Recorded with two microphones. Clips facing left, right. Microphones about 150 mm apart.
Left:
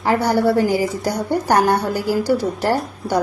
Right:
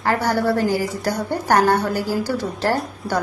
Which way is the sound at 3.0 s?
Centre (ahead or behind).